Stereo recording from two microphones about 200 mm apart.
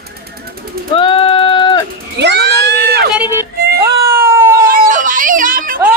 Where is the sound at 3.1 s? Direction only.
10° right (ahead or behind).